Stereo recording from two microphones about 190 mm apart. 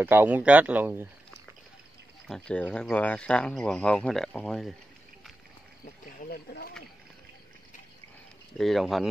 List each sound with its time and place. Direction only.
0.0 s speech: 10° right (ahead or behind)
2.2 s speech: 5° left (ahead or behind)
6.0 s speech: 55° left (ahead or behind)
8.5 s speech: centre (ahead or behind)